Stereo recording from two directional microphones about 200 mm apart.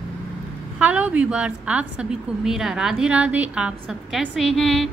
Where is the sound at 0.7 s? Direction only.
5° right (ahead or behind).